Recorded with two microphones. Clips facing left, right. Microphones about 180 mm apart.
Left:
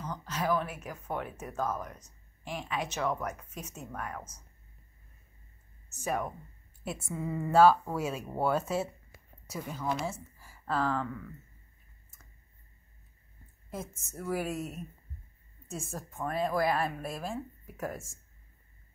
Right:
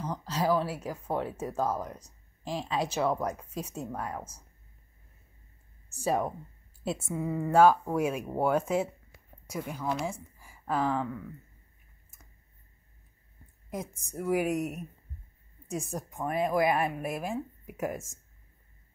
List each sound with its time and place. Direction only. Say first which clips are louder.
0.0 s speech: right 4 dB; 30° right (ahead or behind)
5.9 s a woman's voice: right 4 dB; 30° right (ahead or behind)
7.2 s a woman's voice: right 1 dB; 10° right (ahead or behind)
13.7 s a woman's voice: right 3 dB; 15° right (ahead or behind)